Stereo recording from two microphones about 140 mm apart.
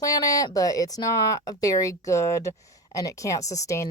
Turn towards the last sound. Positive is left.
turn(degrees=20)  # may be behind; listen again after turning